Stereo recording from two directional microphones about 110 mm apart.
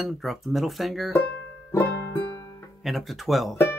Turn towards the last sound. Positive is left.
turn(degrees=0)  # may be behind; listen again after turning